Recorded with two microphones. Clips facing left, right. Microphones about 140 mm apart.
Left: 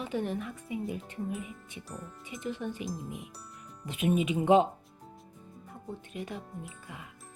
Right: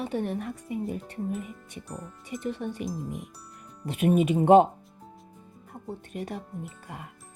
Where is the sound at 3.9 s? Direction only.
45° right (ahead or behind).